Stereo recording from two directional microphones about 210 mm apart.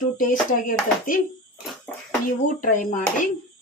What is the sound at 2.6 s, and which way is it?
Speech, 40° left (ahead or behind).